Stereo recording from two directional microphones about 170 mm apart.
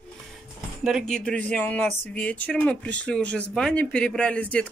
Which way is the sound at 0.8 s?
Centre (ahead or behind).